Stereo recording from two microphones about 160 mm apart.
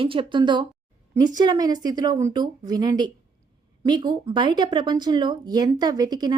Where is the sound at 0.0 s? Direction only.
35° right (ahead or behind).